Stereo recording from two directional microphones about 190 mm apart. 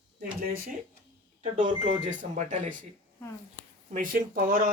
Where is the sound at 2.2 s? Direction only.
45° right (ahead or behind).